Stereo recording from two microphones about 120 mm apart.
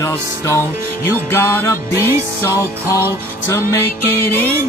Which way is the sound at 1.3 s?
20° left (ahead or behind).